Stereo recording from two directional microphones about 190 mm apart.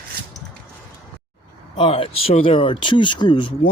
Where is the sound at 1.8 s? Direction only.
30° left (ahead or behind).